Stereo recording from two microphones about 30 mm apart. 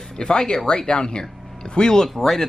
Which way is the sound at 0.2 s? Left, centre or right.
Left.